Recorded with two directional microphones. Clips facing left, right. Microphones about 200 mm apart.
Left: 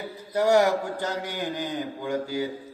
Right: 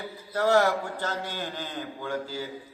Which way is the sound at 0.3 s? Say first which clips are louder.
Left 2 dB; 15° left (ahead or behind).